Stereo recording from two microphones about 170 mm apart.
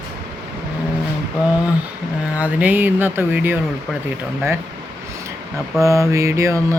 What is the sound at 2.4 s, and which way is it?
Speech, 10° right (ahead or behind).